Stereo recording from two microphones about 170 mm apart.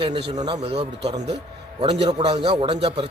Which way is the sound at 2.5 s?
30° right (ahead or behind).